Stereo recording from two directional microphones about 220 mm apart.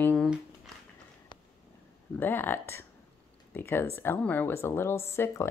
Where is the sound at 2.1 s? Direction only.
10° left (ahead or behind).